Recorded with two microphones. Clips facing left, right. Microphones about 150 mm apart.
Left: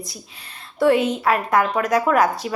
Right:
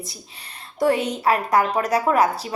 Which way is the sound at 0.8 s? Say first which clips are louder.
Left 3 dB; 35° right (ahead or behind).